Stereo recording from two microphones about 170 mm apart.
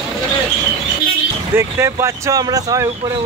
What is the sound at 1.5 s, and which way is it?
Speech, 15° right (ahead or behind).